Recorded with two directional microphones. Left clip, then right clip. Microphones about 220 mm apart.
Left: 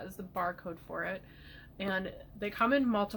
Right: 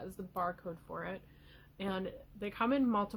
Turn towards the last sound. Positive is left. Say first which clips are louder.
# left 3 dB
turn(degrees=-45)  # may be behind; listen again after turning